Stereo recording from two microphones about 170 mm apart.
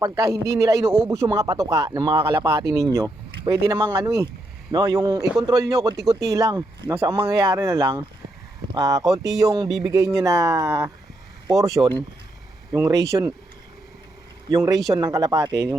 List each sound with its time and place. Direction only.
0.0 s speech: 15° right (ahead or behind)
5.2 s speech: centre (ahead or behind)
5.5 s speech: 20° right (ahead or behind)
6.0 s speech: centre (ahead or behind)
6.2 s speech: 20° right (ahead or behind)
14.5 s speech: 20° right (ahead or behind)